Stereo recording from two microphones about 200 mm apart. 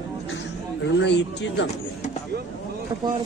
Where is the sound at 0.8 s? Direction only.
60° left (ahead or behind).